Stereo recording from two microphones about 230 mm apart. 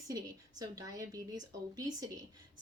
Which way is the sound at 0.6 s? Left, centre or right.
Centre.